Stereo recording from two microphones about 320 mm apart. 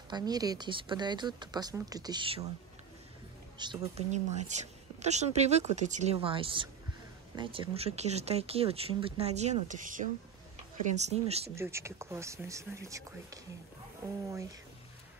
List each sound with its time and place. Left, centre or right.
0.1 s speech: centre
3.5 s speech: centre
11.5 s speech: centre